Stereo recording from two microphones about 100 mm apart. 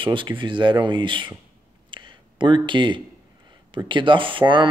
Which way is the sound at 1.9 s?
50° right (ahead or behind).